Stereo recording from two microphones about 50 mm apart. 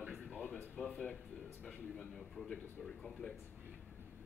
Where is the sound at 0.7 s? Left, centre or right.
Left.